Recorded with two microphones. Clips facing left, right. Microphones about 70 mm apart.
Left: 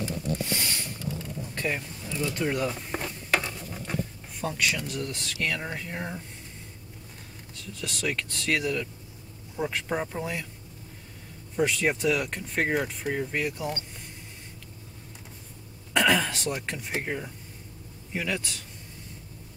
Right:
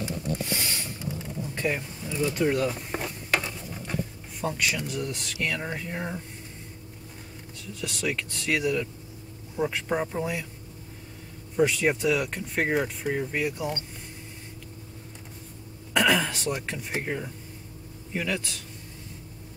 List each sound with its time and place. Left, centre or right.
1.5 s speech: centre
2.4 s a sound: centre
4.4 s speech: centre
7.8 s speech: centre
11.5 s speech: centre
15.9 s a sound: centre
17.0 s speech: centre